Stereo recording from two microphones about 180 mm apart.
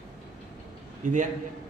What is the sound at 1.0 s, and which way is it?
Speech, 45° right (ahead or behind).